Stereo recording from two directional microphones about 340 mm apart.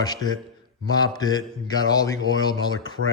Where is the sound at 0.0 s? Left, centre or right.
Centre.